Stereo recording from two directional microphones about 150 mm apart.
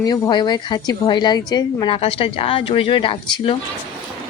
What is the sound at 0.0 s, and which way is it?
A woman's voice, 30° left (ahead or behind).